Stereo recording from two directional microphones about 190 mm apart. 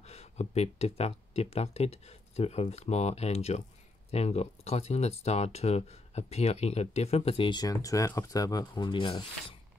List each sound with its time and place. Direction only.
0.0 s speech: 35° left (ahead or behind)